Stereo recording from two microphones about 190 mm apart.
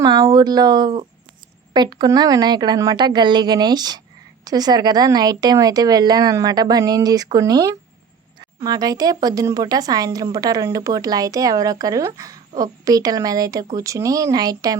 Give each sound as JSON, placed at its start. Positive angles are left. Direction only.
{"t": 0.0, "sound": "speech", "side_deg": -20}